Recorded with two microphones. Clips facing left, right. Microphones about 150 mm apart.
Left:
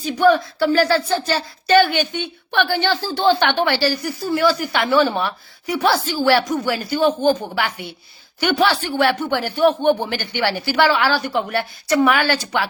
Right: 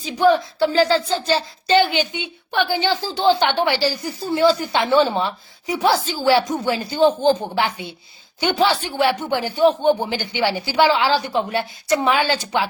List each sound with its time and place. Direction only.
0.0 s speech: 20° right (ahead or behind)